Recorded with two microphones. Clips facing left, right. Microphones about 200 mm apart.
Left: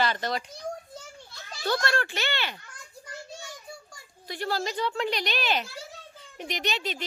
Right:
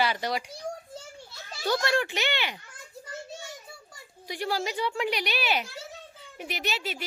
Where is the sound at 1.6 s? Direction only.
15° right (ahead or behind).